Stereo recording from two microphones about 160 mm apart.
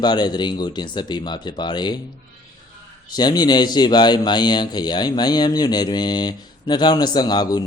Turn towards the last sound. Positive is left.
turn(degrees=25)  # may be behind; listen again after turning